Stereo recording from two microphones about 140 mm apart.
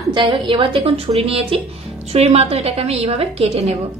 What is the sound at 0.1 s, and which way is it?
A woman's voice, 35° right (ahead or behind).